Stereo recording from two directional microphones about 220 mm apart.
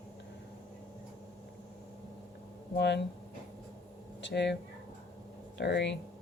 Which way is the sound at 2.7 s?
50° left (ahead or behind).